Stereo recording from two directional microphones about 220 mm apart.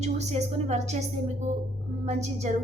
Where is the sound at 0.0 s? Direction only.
30° right (ahead or behind).